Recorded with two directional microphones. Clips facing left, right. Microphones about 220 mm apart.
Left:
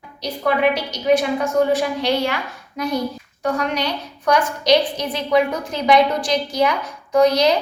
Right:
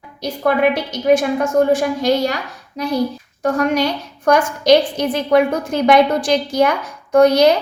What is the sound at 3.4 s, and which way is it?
A woman's voice, 45° right (ahead or behind).